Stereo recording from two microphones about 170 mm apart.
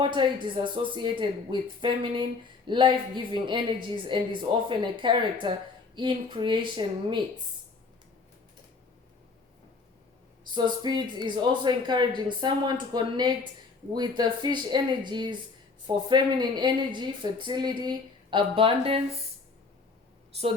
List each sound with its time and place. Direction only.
0.0 s a woman's voice: 30° right (ahead or behind)
10.5 s a woman's voice: 25° right (ahead or behind)
20.3 s a woman's voice: 40° right (ahead or behind)